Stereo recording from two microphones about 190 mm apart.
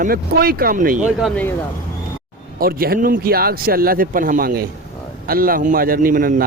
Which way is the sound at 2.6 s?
50° right (ahead or behind).